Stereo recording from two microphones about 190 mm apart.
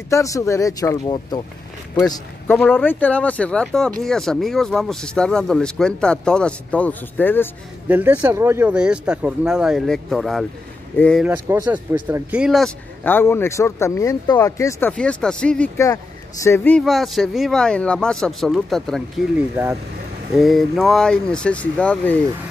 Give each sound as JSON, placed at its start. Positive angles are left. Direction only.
{"t": 0.1, "sound": "a man's voice", "side_deg": 15}
{"t": 7.9, "sound": "speech", "side_deg": -10}
{"t": 11.2, "sound": "speech", "side_deg": -15}
{"t": 13.0, "sound": "speech", "side_deg": 10}
{"t": 16.8, "sound": "speech", "side_deg": 0}
{"t": 19.5, "sound": "speech", "side_deg": -10}